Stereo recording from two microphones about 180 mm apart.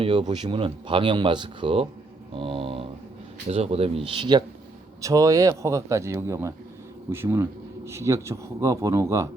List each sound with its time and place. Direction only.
0.0 s speech: 30° right (ahead or behind)